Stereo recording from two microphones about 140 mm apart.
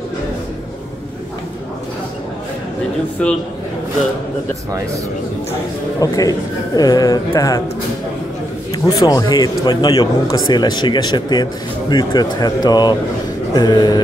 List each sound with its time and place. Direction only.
3.2 s a man's voice: 10° left (ahead or behind)
5.5 s a man's voice: 25° left (ahead or behind)
8.7 s a man's voice: 25° left (ahead or behind)